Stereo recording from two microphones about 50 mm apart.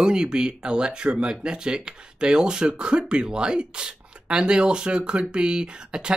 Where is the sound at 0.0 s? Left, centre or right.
Centre.